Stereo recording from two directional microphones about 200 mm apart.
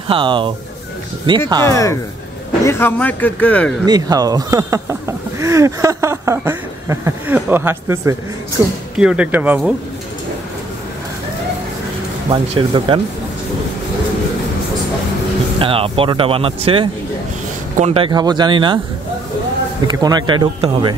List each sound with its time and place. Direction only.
0.1 s speech: 25° right (ahead or behind)
1.7 s a man's voice: 15° left (ahead or behind)
3.8 s speech: 20° right (ahead or behind)
12.3 s speech: 25° right (ahead or behind)
15.6 s speech: 25° right (ahead or behind)
19.9 s speech: 20° right (ahead or behind)